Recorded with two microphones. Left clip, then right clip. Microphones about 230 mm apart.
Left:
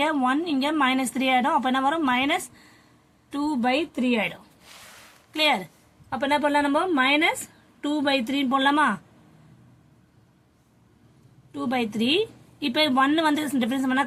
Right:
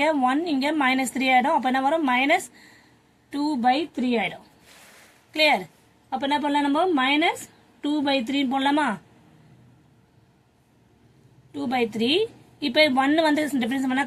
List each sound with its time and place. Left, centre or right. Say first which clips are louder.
0.0 s a woman's voice: right 2 dB; centre
6.1 s a woman's voice: left 1 dB; left
11.5 s a woman's voice: right 2 dB; centre